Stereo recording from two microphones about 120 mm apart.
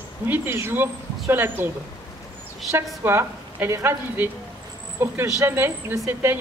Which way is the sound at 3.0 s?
20° right (ahead or behind).